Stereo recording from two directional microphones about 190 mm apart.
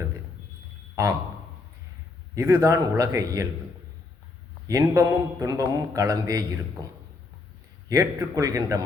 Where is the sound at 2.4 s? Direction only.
15° right (ahead or behind).